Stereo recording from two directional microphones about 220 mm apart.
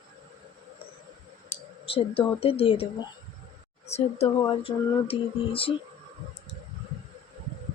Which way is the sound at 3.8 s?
30° left (ahead or behind).